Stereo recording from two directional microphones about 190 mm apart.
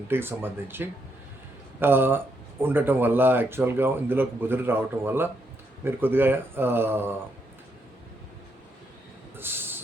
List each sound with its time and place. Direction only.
0.1 s speech: 10° right (ahead or behind)
9.3 s train: 10° right (ahead or behind)